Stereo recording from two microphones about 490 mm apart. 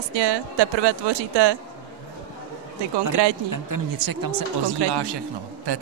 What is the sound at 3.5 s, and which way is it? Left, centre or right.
Speech, right.